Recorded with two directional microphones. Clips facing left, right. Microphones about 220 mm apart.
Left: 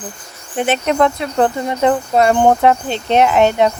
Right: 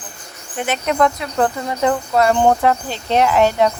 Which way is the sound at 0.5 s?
30° left (ahead or behind).